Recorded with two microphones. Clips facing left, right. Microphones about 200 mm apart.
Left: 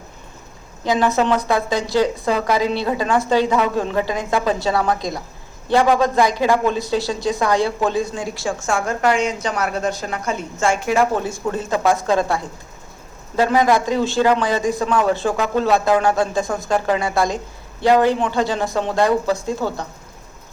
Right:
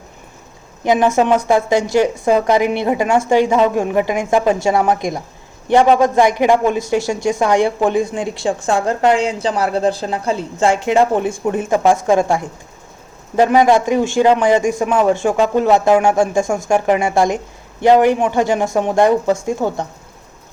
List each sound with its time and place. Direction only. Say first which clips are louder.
0.9 s speech: right 4 dB; 15° right (ahead or behind)
8.5 s a woman's voice: right 4 dB; 35° right (ahead or behind)
10.7 s speech: right 3 dB; 20° right (ahead or behind)